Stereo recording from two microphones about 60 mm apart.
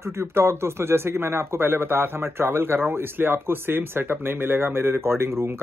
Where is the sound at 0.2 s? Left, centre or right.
Right.